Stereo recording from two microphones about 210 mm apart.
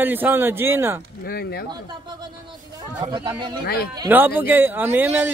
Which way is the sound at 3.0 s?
20° right (ahead or behind).